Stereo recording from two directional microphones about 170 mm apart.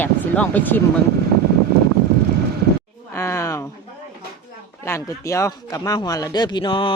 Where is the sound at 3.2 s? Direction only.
15° left (ahead or behind).